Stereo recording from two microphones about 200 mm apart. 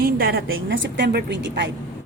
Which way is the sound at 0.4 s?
80° right.